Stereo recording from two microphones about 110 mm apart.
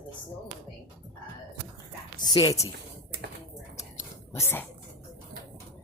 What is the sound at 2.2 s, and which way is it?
Speech, 35° left (ahead or behind).